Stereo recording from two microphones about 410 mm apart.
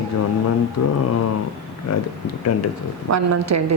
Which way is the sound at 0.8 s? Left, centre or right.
Left.